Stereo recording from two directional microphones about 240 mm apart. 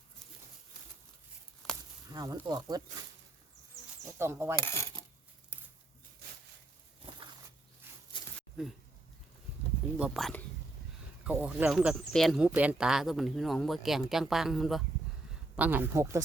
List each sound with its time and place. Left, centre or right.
2.0 s speech: centre
4.0 s speech: centre
4.6 s coin: centre
8.4 s a sound: centre
10.0 s speech: centre
11.4 s speech: centre